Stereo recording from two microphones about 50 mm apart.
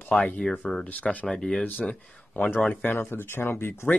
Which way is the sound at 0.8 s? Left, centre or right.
Left.